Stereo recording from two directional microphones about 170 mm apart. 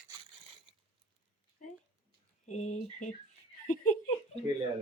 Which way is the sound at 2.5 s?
45° left (ahead or behind).